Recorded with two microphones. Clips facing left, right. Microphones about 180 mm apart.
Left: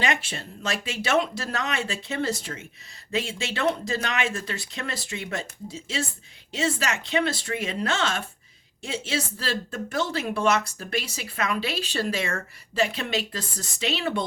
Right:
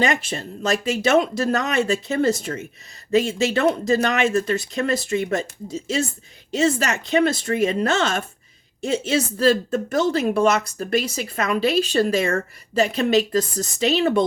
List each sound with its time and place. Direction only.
0.0 s speech: 40° right (ahead or behind)